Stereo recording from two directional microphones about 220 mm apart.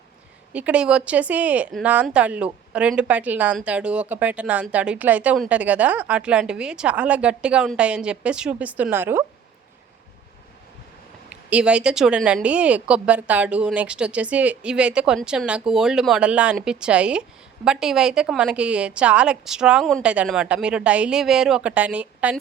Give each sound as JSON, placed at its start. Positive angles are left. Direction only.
{"t": 0.5, "sound": "speech", "side_deg": -5}
{"t": 11.3, "sound": "speech", "side_deg": -5}